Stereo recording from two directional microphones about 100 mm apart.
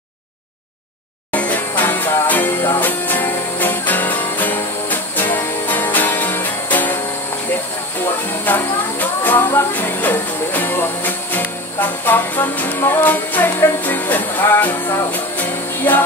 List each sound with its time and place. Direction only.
1.3 s music: 15° left (ahead or behind)
8.3 s speech: 20° left (ahead or behind)
15.1 s music: 20° left (ahead or behind)